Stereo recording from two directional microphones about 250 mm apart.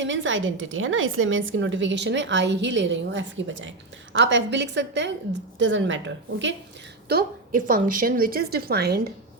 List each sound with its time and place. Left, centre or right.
0.0 s a woman's voice: right
7.1 s a woman's voice: right